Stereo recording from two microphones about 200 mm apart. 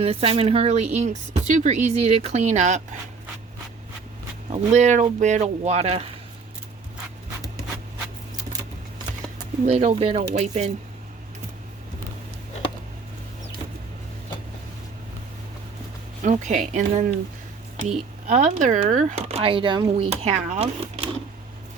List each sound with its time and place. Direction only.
0.0 s speech: 30° right (ahead or behind)
4.4 s speech: 30° right (ahead or behind)
9.6 s speech: 35° right (ahead or behind)
16.2 s speech: 35° right (ahead or behind)